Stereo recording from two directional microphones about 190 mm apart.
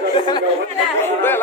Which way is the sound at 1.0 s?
10° left (ahead or behind).